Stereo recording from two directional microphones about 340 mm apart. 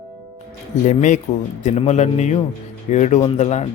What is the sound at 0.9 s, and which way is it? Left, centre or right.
Speech, left.